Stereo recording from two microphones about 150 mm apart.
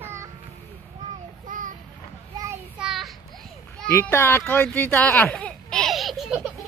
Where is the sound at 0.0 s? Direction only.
15° right (ahead or behind).